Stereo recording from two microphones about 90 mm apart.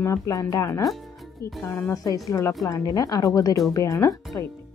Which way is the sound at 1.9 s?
40° left (ahead or behind).